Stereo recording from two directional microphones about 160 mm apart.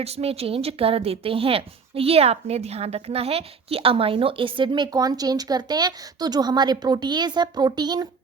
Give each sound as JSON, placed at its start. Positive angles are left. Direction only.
{"t": 0.0, "sound": "speech", "side_deg": -40}